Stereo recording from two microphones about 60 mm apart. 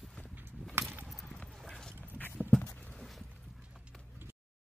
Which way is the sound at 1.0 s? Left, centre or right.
Centre.